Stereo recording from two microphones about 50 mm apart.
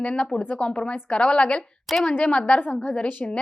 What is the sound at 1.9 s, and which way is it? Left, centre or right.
Speech, centre.